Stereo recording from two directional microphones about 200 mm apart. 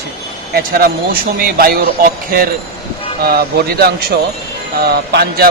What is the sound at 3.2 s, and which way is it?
Speech, 50° right (ahead or behind).